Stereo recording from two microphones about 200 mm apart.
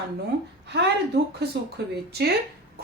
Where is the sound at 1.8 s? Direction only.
60° right (ahead or behind).